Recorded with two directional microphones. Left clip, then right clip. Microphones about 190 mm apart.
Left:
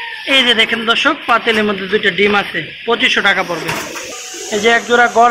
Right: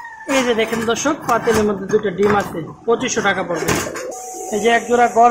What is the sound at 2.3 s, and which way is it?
Speech, 10° left (ahead or behind).